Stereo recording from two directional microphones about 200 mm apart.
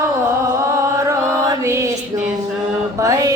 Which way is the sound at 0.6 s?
15° right (ahead or behind).